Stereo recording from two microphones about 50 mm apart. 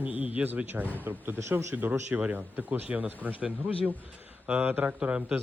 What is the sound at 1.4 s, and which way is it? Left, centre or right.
Speech, right.